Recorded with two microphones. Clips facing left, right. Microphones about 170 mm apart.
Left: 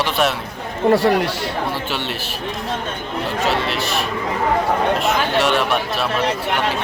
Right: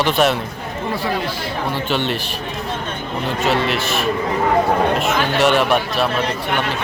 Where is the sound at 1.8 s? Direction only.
5° left (ahead or behind).